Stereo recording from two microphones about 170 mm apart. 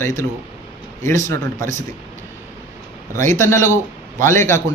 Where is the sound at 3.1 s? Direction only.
50° right (ahead or behind).